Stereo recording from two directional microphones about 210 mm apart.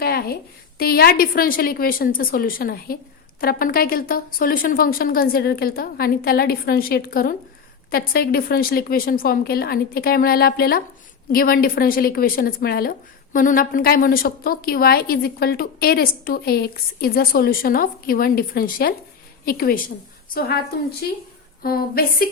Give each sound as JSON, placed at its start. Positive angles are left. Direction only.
{"t": 0.0, "sound": "a sound", "side_deg": 45}
{"t": 0.8, "sound": "a woman's voice", "side_deg": 45}
{"t": 21.6, "sound": "a woman's voice", "side_deg": 45}